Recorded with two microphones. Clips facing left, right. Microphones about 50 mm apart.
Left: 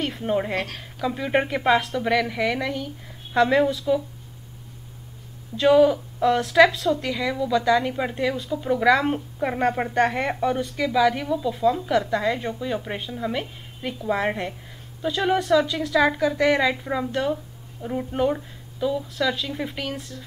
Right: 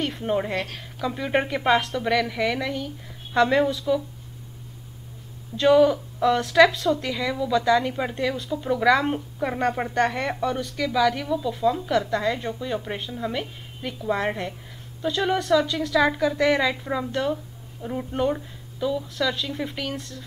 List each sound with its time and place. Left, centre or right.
0.2 s speech: centre
0.6 s a woman's voice: left
1.0 s a woman's voice: centre
5.6 s a woman's voice: centre